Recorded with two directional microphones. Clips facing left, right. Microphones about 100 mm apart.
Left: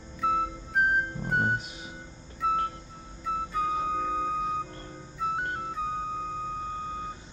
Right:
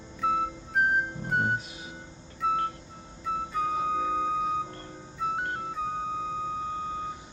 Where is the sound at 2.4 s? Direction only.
Centre (ahead or behind).